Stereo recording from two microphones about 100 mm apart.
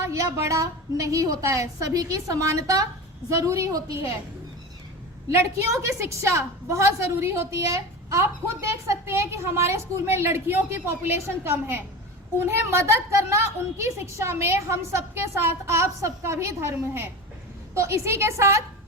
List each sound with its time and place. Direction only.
0.0 s a woman's voice: 30° right (ahead or behind)
5.3 s a woman's voice: 25° right (ahead or behind)